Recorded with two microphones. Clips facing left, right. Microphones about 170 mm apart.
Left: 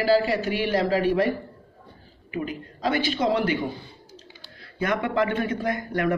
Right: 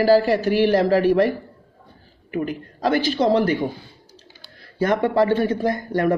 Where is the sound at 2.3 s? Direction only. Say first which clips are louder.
Right 5 dB; 45° right (ahead or behind).